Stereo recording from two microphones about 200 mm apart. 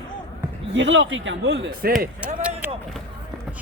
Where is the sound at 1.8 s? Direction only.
50° right (ahead or behind).